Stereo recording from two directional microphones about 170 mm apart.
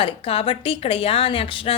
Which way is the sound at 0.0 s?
30° left (ahead or behind).